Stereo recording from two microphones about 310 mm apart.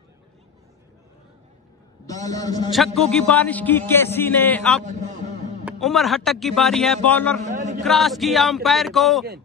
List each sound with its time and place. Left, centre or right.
2.0 s a man's voice: centre
2.7 s a man's voice: centre
4.8 s a sound: right
5.7 s a man's voice: centre
7.4 s a sound: right
7.8 s a man's voice: centre